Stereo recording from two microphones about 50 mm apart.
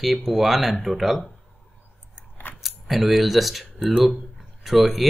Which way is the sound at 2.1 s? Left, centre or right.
Left.